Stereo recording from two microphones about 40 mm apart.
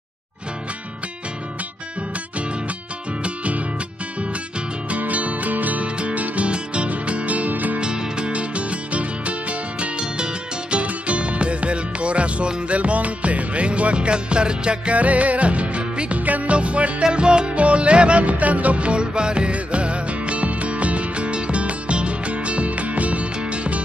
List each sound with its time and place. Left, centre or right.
3.3 s music: right
4.8 s music: right
7.8 s music: right
15.0 s music: right